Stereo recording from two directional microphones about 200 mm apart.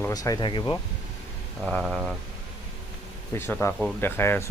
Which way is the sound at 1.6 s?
Centre (ahead or behind).